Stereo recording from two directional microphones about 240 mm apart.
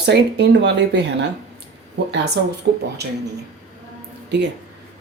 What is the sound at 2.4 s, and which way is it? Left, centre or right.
Speech, right.